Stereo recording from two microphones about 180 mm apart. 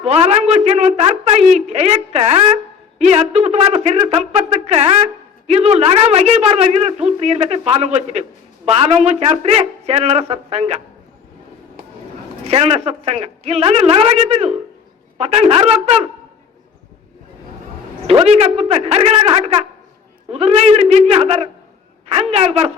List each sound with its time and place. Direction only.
0.0 s a man's voice: 35° right (ahead or behind)
12.5 s a man's voice: 35° right (ahead or behind)
18.1 s a man's voice: 35° right (ahead or behind)